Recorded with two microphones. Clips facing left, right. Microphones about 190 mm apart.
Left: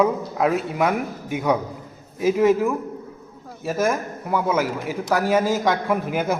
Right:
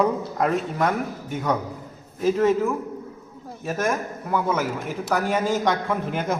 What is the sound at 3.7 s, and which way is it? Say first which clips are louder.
A man's voice: left 3 dB; 5° left (ahead or behind).